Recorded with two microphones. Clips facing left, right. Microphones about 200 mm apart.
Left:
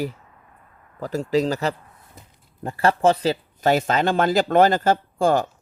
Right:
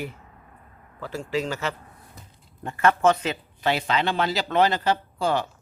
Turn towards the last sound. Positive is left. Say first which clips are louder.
# left 5 dB
turn(degrees=45)  # may be behind; listen again after turning